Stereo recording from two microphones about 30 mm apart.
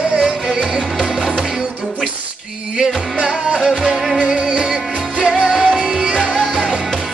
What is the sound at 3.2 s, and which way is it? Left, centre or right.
Music, right.